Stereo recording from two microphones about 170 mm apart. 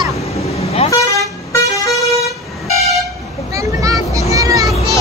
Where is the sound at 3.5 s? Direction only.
20° right (ahead or behind).